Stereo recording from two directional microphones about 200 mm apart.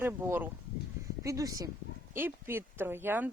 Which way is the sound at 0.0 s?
10° right (ahead or behind).